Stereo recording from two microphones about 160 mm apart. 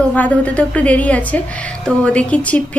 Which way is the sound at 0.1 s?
10° left (ahead or behind).